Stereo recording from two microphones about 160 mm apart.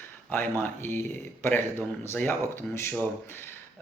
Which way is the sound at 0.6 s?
15° left (ahead or behind).